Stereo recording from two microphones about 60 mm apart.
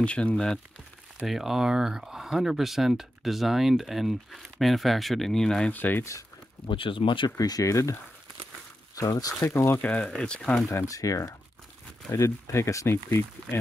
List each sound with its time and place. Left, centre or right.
0.0 s speech: centre
1.2 s speech: centre
5.7 s speech: left
7.3 s speech: left
8.9 s speech: left
9.5 s speech: left
9.8 s speech: left
10.9 s speech: left
12.1 s speech: left